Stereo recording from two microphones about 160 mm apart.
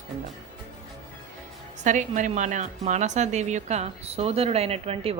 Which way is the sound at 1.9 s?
50° right (ahead or behind).